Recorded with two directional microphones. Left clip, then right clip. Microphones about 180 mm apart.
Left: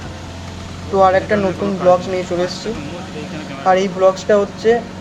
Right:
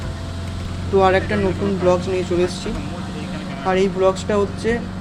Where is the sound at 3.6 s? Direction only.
20° right (ahead or behind).